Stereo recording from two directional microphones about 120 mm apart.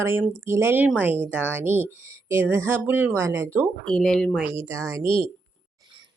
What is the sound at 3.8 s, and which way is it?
Speech, 5° left (ahead or behind).